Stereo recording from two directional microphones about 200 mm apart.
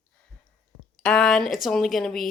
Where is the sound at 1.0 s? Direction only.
5° left (ahead or behind).